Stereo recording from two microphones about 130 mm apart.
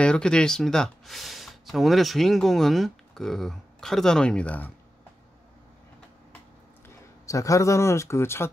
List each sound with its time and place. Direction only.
0.0 s speech: 5° left (ahead or behind)
7.2 s speech: 25° left (ahead or behind)